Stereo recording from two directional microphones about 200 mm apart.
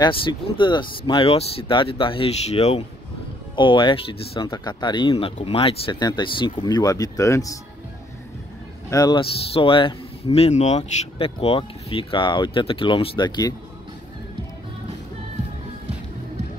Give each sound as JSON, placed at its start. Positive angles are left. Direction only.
{"t": 0.0, "sound": "speech", "side_deg": 25}
{"t": 8.9, "sound": "speech", "side_deg": 20}